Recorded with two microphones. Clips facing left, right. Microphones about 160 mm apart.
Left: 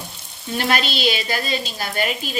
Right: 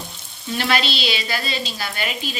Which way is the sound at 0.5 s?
45° left (ahead or behind).